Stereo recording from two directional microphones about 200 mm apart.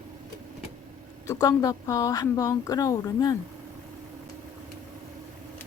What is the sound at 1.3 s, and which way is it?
A woman's voice, 15° left (ahead or behind).